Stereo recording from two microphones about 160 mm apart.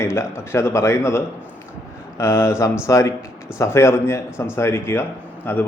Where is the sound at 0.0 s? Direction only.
15° left (ahead or behind).